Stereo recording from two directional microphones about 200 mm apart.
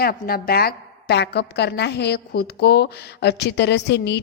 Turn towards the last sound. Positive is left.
turn(degrees=60)  # may be behind; listen again after turning